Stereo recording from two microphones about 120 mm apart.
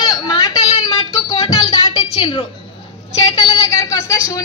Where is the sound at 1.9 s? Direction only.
45° left (ahead or behind).